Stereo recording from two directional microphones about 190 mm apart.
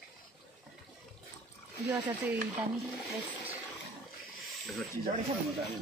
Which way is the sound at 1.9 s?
10° right (ahead or behind).